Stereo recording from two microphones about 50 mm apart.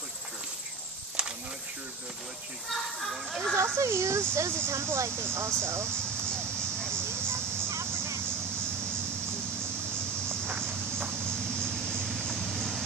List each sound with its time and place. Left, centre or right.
1.2 s a sound: right
2.7 s speech: centre
3.5 s speech: right
5.9 s a sound: centre
7.6 s vehicle: right
11.0 s vehicle: centre